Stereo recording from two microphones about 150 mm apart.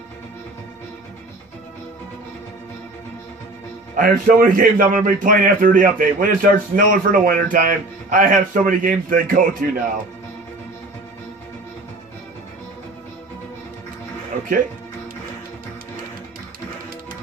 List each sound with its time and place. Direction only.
3.9 s a man's voice: 65° right (ahead or behind)